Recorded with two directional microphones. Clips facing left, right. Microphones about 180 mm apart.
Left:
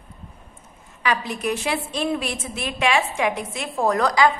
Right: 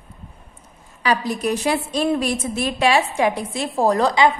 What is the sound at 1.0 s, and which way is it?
A woman's voice, 35° right (ahead or behind).